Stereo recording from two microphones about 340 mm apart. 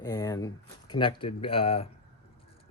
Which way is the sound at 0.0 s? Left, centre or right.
Centre.